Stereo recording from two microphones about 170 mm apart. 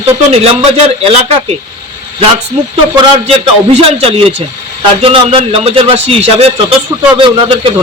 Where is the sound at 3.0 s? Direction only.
30° right (ahead or behind).